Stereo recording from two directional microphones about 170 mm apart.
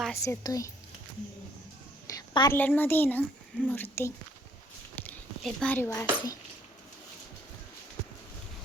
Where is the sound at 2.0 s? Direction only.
25° left (ahead or behind).